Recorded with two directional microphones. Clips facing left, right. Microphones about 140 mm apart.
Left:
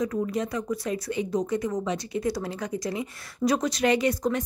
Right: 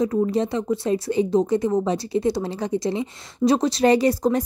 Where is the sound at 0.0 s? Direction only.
30° right (ahead or behind).